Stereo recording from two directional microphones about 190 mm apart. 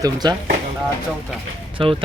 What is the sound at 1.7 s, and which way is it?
Speech, 25° right (ahead or behind).